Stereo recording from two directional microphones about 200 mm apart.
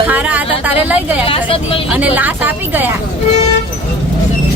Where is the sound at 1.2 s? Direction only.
25° left (ahead or behind).